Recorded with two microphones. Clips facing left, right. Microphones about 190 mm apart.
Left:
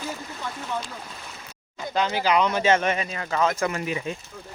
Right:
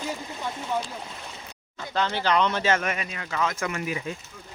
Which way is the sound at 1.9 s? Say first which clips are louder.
Left 2 dB; 15° left (ahead or behind).